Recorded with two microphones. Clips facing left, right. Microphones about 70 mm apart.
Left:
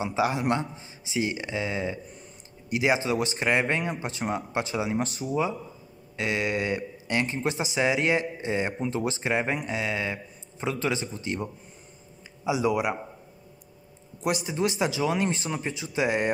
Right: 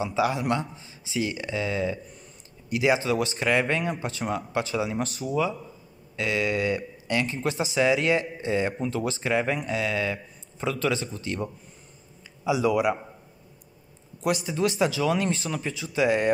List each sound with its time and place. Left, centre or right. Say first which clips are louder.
0.0 s speech: right 1 dB; left
12.4 s speech: right 2 dB; centre
14.2 s speech: right 2 dB; centre